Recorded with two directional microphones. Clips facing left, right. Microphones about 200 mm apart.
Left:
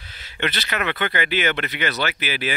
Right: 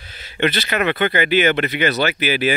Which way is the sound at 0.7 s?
10° right (ahead or behind).